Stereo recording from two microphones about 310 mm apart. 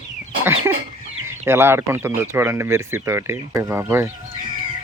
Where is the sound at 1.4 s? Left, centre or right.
Centre.